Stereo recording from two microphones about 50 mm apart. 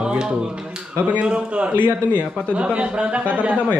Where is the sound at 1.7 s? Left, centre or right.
Right.